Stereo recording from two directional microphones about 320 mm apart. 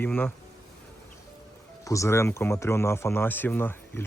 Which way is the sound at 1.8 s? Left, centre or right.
Centre.